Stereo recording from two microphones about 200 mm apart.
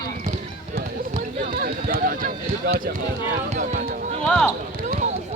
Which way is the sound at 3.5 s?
40° right (ahead or behind).